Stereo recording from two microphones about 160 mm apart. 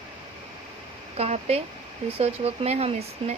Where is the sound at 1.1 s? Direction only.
40° right (ahead or behind).